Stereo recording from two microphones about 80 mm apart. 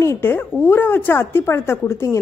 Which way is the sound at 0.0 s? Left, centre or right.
Left.